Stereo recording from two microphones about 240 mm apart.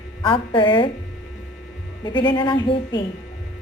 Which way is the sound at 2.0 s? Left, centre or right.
Centre.